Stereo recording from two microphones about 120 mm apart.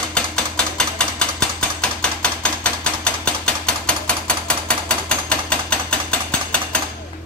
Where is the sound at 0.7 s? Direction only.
5° left (ahead or behind).